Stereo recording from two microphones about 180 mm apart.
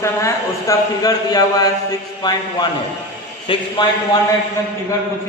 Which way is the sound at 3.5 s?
25° left (ahead or behind).